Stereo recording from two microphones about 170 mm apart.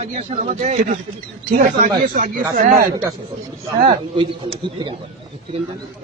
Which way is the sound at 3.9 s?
30° right (ahead or behind).